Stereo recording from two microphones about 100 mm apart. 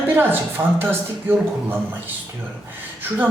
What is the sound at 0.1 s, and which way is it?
A woman's voice, 20° right (ahead or behind).